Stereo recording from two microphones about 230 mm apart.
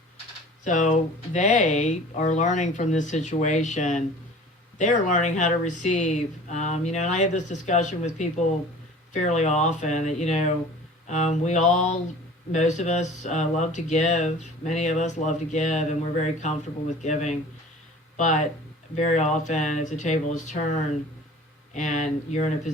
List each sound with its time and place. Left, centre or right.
0.6 s speech: left